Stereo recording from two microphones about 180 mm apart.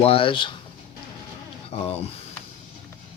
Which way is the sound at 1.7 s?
35° left (ahead or behind).